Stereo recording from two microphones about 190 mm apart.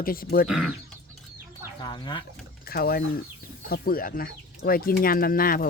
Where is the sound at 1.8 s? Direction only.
25° left (ahead or behind).